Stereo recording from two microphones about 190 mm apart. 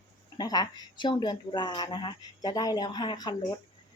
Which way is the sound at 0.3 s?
20° left (ahead or behind).